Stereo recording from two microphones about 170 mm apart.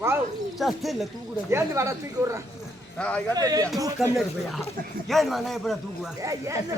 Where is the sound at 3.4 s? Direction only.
20° right (ahead or behind).